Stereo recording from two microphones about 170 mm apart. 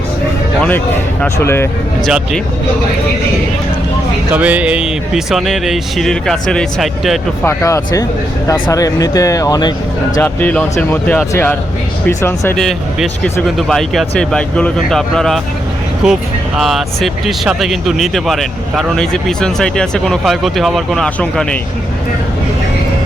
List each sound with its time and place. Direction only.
1.2 s speech: 15° left (ahead or behind)
2.0 s speech: centre (ahead or behind)
4.3 s speech: 10° right (ahead or behind)
7.4 s speech: 20° left (ahead or behind)
10.2 s speech: 10° left (ahead or behind)
12.5 s speech: centre (ahead or behind)